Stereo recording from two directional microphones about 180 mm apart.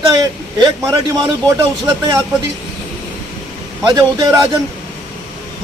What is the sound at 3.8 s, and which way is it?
Speech, 20° right (ahead or behind).